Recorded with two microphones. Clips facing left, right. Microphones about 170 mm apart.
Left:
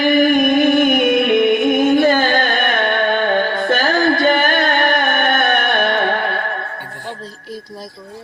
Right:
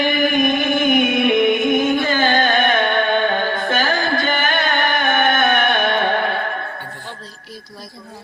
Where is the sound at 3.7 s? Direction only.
50° left (ahead or behind).